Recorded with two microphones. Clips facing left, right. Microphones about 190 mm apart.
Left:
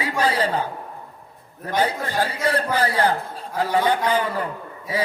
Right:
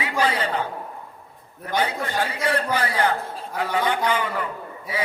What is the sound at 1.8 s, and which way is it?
Speech, 35° left (ahead or behind).